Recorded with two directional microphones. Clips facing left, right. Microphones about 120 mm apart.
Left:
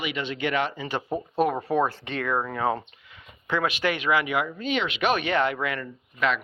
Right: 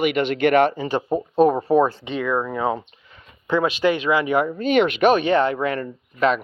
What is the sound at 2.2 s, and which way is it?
Speech, 5° right (ahead or behind).